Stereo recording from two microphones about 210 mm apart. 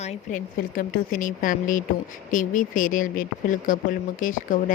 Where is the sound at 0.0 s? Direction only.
40° left (ahead or behind).